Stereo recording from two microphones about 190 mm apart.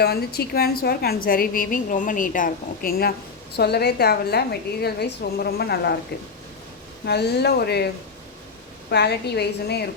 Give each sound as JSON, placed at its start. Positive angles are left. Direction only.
{"t": 0.0, "sound": "a woman's voice", "side_deg": 55}
{"t": 7.0, "sound": "a woman's voice", "side_deg": 60}
{"t": 8.9, "sound": "a woman's voice", "side_deg": 60}